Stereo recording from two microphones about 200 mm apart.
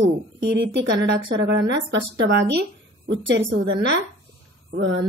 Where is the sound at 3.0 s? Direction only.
60° right (ahead or behind).